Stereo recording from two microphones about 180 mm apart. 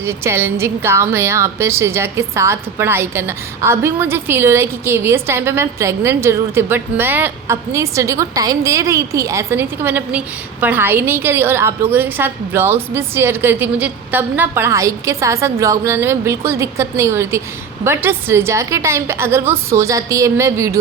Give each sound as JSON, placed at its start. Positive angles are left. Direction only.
{"t": 0.0, "sound": "a woman's voice", "side_deg": -15}